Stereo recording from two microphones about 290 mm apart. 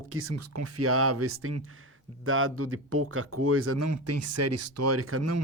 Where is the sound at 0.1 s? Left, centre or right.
Right.